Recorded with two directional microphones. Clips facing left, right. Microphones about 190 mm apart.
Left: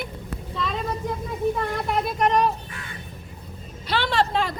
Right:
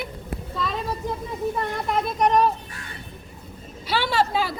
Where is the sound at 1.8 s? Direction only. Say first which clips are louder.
Right 2 dB; centre (ahead or behind).